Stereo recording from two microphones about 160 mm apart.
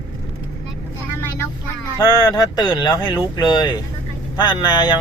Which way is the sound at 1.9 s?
25° left (ahead or behind).